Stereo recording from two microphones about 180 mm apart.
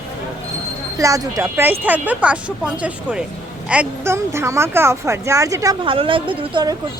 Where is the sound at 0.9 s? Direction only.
20° right (ahead or behind).